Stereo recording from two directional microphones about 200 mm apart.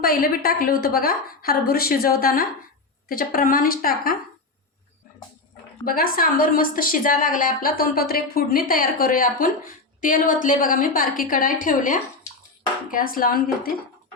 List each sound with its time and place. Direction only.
0.0 s a woman's voice: 45° left (ahead or behind)
5.8 s a woman's voice: 45° left (ahead or behind)